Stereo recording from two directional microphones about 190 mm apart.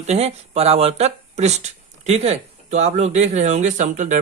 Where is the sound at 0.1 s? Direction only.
35° right (ahead or behind).